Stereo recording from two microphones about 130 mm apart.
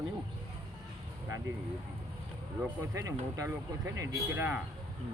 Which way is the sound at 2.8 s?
25° right (ahead or behind).